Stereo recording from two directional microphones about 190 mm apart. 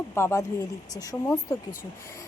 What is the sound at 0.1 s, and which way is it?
Speech, 15° left (ahead or behind).